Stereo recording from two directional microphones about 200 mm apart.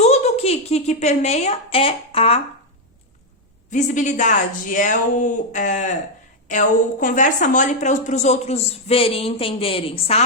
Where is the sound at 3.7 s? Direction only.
35° left (ahead or behind).